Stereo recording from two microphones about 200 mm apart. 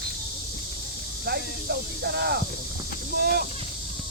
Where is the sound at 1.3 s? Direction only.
55° right (ahead or behind).